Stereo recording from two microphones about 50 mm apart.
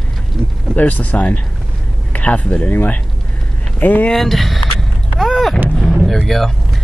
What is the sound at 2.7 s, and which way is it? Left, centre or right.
Speech, left.